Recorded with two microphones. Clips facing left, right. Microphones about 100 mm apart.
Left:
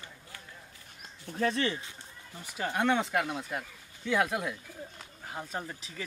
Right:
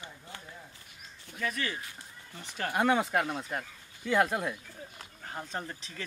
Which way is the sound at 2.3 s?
10° left (ahead or behind).